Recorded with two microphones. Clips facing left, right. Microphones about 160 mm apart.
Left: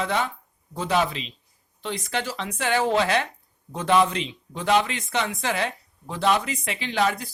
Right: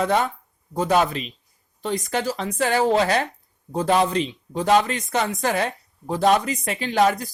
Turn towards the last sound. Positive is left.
turn(degrees=-40)  # may be behind; listen again after turning